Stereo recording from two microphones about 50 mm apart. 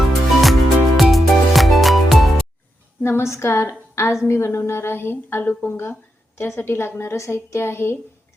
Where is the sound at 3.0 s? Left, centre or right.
Left.